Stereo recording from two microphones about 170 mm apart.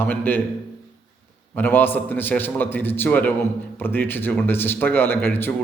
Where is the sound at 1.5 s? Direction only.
10° left (ahead or behind).